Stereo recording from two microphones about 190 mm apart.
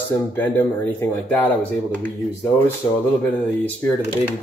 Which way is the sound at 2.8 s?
20° left (ahead or behind).